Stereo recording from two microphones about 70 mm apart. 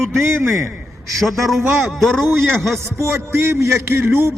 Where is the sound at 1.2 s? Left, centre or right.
Centre.